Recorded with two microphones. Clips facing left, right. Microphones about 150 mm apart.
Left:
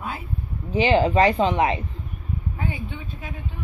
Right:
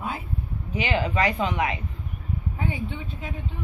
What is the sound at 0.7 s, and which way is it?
Speech, 30° left (ahead or behind).